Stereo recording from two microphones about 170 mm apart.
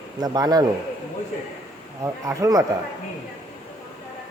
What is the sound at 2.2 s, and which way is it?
Speech, 20° right (ahead or behind).